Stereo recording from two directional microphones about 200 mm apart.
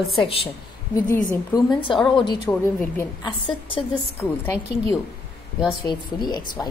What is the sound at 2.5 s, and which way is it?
Speech, 10° left (ahead or behind).